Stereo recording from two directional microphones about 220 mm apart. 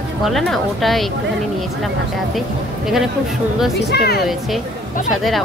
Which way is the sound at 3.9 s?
45° left (ahead or behind).